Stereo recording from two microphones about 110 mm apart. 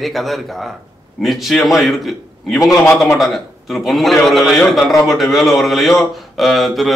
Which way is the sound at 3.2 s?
Centre (ahead or behind).